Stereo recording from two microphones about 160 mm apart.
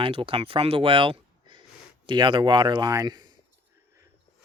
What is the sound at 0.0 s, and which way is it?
Speech, 35° right (ahead or behind).